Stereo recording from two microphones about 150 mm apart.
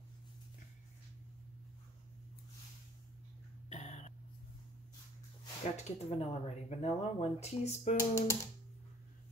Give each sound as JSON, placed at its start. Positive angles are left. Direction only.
{"t": 3.6, "sound": "cough", "side_deg": 50}
{"t": 5.9, "sound": "speech", "side_deg": 45}
{"t": 8.0, "sound": "speech", "side_deg": 20}